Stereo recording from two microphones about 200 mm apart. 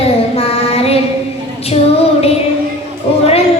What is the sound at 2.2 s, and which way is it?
Child singing, 30° left (ahead or behind).